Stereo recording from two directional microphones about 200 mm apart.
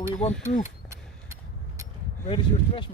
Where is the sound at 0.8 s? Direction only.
15° right (ahead or behind).